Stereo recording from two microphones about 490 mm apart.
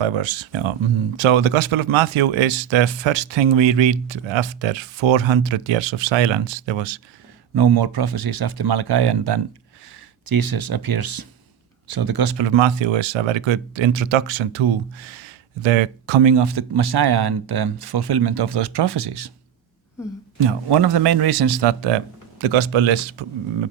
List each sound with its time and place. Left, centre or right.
0.0 s speech: right
7.5 s speech: right
20.4 s speech: right
22.4 s speech: right